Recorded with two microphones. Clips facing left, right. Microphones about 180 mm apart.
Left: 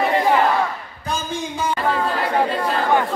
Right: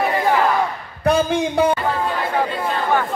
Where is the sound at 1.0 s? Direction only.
65° right (ahead or behind).